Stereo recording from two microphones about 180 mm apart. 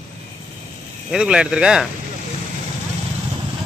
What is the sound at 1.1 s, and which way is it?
Speech, 5° right (ahead or behind).